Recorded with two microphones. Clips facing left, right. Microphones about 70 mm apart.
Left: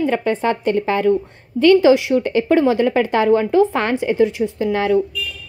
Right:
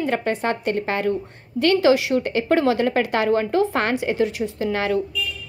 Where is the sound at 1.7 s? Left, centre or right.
Left.